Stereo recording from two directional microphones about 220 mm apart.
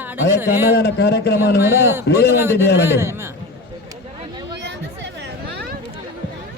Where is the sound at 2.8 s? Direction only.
10° right (ahead or behind).